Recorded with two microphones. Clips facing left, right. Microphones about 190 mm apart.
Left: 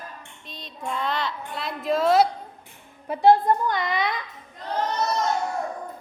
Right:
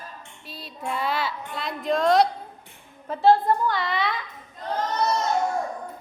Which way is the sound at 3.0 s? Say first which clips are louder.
Left 1 dB; 15° left (ahead or behind).